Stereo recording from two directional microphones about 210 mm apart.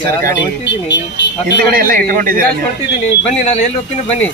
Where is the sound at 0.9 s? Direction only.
55° left (ahead or behind).